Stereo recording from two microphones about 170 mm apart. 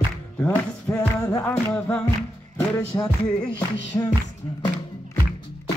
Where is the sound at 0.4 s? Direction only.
15° left (ahead or behind).